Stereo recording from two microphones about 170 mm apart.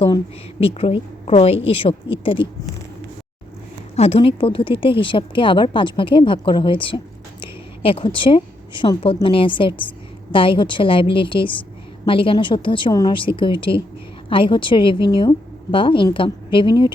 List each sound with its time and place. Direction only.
0.6 s speech: 35° left (ahead or behind)
3.9 s a woman's voice: 35° left (ahead or behind)